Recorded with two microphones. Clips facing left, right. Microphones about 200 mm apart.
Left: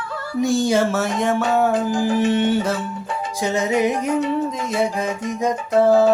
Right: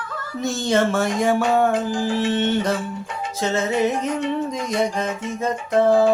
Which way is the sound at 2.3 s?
10° left (ahead or behind).